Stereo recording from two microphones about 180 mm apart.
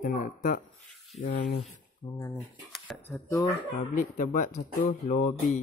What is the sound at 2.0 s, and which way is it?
Speech, 20° left (ahead or behind).